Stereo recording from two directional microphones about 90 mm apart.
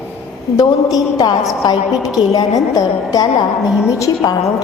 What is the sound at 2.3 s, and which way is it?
A woman's voice, 40° left (ahead or behind).